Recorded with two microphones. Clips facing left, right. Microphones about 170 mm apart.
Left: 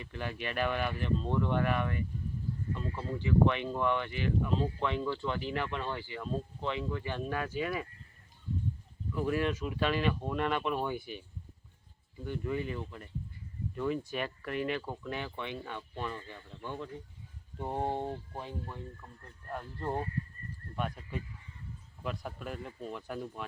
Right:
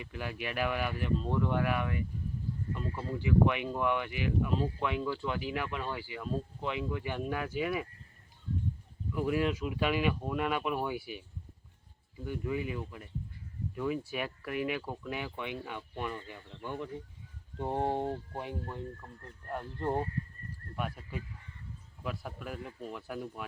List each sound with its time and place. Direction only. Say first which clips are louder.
0.0 s speech: even; 10° right (ahead or behind)
9.1 s speech: right 1 dB; 10° right (ahead or behind)
20.7 s speech: left 1 dB; 5° right (ahead or behind)